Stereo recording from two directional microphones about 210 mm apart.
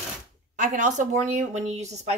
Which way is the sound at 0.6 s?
35° right (ahead or behind).